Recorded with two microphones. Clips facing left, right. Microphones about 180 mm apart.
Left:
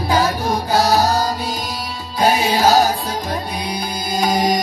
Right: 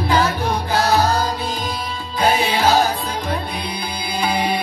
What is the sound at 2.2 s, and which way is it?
Music, 40° left (ahead or behind).